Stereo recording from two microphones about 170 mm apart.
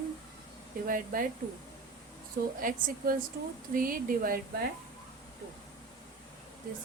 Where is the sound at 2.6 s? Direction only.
55° right (ahead or behind).